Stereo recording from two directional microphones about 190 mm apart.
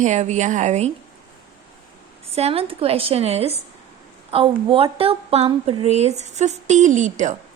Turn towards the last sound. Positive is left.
turn(degrees=-40)  # may be behind; listen again after turning